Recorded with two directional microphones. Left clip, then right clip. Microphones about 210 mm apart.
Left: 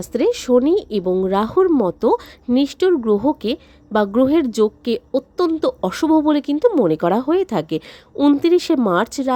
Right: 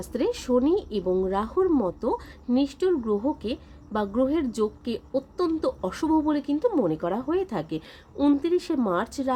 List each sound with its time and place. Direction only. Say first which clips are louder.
0.0 s a woman's voice: left 9 dB; 35° left (ahead or behind)